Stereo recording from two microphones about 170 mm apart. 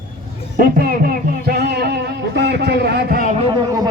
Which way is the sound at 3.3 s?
35° right (ahead or behind).